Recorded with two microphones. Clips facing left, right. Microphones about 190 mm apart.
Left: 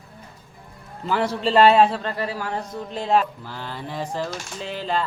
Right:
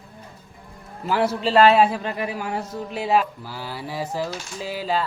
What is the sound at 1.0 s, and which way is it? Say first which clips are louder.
A man's voice: right 1 dB; 5° right (ahead or behind).